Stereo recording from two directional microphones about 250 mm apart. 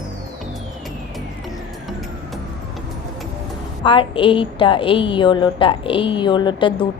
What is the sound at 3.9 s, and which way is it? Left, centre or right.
A woman's voice, centre.